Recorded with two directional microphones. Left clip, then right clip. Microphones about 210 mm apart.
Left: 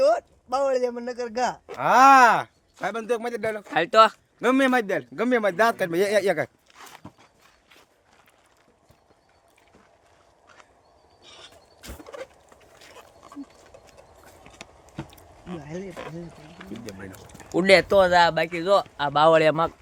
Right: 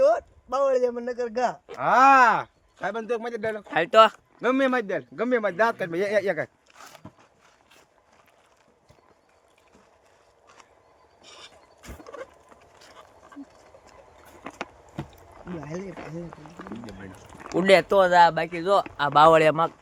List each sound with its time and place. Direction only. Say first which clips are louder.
0.0 s a man's voice: even; 5° left (ahead or behind)
1.8 s a man's voice: left 2 dB; 60° left (ahead or behind)
3.7 s speech: even; centre (ahead or behind)
4.4 s a man's voice: left 3 dB; 50° left (ahead or behind)
6.7 s walk: left 1 dB; 20° right (ahead or behind)
10.4 s boat: left 1 dB; 40° right (ahead or behind)
11.2 s mechanisms: even; 45° right (ahead or behind)
11.8 s mechanisms: left 1 dB; 15° left (ahead or behind)
15.0 s a sound: even; 45° right (ahead or behind)
15.6 s speech: right 1 dB; 40° right (ahead or behind)
16.7 s speech: left 7 dB; 35° left (ahead or behind)
17.5 s speech: left 1 dB; 5° right (ahead or behind)
18.7 s speech: right 1 dB; 25° right (ahead or behind)